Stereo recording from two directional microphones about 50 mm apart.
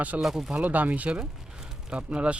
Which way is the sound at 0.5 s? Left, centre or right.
Right.